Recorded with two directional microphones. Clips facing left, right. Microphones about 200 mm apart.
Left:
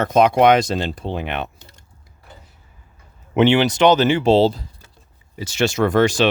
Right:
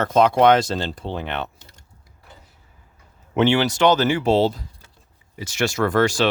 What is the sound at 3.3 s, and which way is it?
Speech, 20° left (ahead or behind).